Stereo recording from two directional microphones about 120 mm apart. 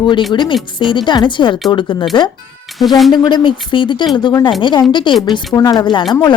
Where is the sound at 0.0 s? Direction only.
40° left (ahead or behind).